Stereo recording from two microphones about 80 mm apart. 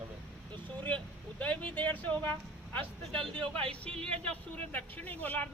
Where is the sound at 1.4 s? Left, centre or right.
Centre.